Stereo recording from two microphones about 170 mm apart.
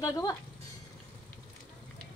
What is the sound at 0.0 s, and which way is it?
Speech, 20° left (ahead or behind).